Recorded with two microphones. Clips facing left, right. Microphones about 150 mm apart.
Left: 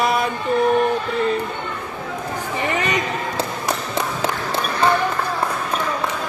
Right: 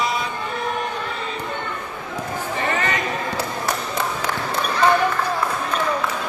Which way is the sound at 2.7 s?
20° left (ahead or behind).